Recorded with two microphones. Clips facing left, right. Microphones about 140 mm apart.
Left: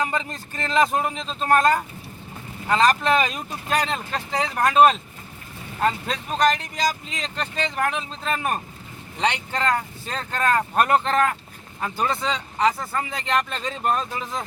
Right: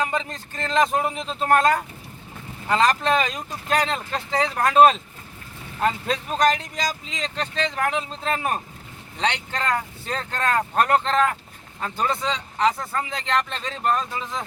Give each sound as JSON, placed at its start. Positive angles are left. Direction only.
{"t": 0.1, "sound": "speech", "side_deg": 5}
{"t": 1.1, "sound": "speech", "side_deg": -10}
{"t": 6.4, "sound": "speech", "side_deg": 0}
{"t": 9.2, "sound": "speech", "side_deg": 5}